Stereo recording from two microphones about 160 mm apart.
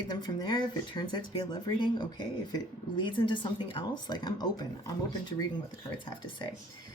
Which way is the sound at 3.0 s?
30° left (ahead or behind).